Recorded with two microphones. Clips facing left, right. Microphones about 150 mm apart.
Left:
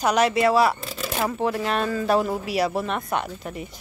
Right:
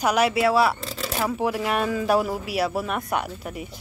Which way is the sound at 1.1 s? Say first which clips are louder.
Even; 10° right (ahead or behind).